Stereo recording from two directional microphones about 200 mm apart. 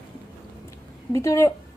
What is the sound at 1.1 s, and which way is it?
Speech, 15° left (ahead or behind).